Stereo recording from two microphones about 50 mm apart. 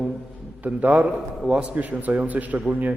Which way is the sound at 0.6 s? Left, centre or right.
Right.